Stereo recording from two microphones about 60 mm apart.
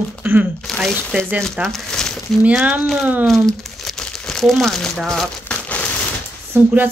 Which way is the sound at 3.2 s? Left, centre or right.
Centre.